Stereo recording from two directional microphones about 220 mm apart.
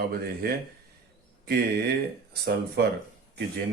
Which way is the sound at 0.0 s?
45° right (ahead or behind).